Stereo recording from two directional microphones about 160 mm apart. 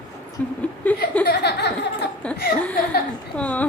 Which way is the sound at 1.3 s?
90° left.